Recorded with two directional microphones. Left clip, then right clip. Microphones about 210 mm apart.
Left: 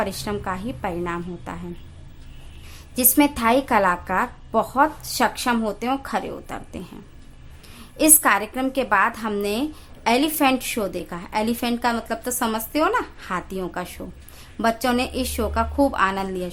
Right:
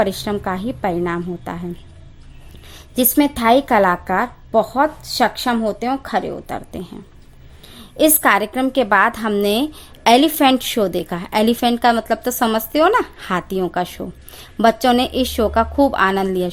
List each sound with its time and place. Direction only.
0.0 s a woman's voice: 25° right (ahead or behind)
2.9 s a woman's voice: 25° right (ahead or behind)
7.9 s a woman's voice: 30° right (ahead or behind)